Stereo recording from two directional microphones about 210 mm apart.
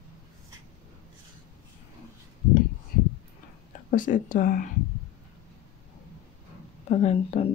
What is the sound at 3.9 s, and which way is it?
Speech, 40° left (ahead or behind).